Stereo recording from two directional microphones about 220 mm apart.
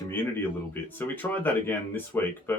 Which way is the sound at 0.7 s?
10° left (ahead or behind).